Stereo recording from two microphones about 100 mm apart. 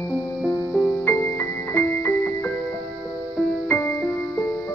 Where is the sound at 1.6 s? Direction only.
20° left (ahead or behind).